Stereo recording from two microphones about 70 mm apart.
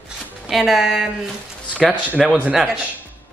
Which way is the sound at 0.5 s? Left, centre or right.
Centre.